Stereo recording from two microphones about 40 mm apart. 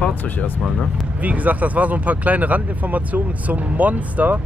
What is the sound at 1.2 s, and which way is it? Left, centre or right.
Speech, right.